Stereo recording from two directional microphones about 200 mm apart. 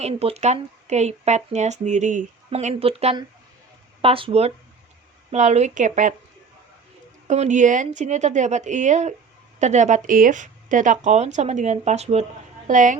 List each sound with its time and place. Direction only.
0.0 s speech: 30° right (ahead or behind)
7.3 s speech: 35° right (ahead or behind)